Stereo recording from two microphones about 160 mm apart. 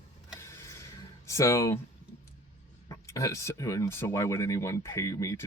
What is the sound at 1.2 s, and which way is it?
Speech, 20° left (ahead or behind).